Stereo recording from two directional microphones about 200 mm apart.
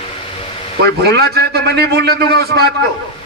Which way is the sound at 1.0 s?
50° right (ahead or behind).